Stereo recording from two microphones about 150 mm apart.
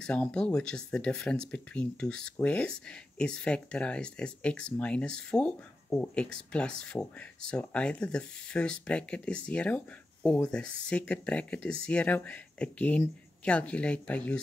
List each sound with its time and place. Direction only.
0.0 s speech: 5° left (ahead or behind)